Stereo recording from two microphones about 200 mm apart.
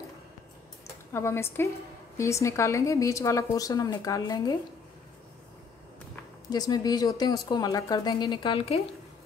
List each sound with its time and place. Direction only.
1.1 s a woman's voice: 15° left (ahead or behind)
6.5 s speech: 20° left (ahead or behind)